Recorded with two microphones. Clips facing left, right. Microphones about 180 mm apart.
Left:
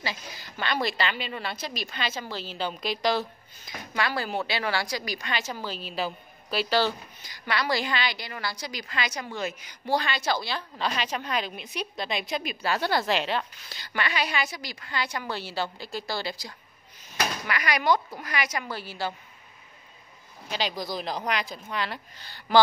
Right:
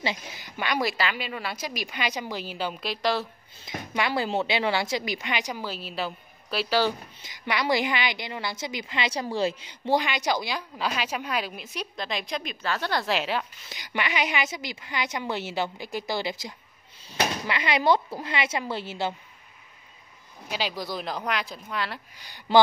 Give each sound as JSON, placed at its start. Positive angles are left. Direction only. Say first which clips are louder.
{"t": 0.0, "sound": "a woman's voice", "louder": "right 4 dB", "side_deg": -20}
{"t": 3.6, "sound": "a woman's voice", "louder": "right 2 dB", "side_deg": -20}
{"t": 7.2, "sound": "a woman's voice", "louder": "right 1 dB", "side_deg": -20}
{"t": 13.0, "sound": "speech", "louder": "even", "side_deg": -5}
{"t": 13.7, "sound": "a woman's voice", "louder": "right 1 dB", "side_deg": -15}
{"t": 20.4, "sound": "speech", "louder": "even", "side_deg": -5}
{"t": 22.2, "sound": "speech", "louder": "right 2 dB", "side_deg": -15}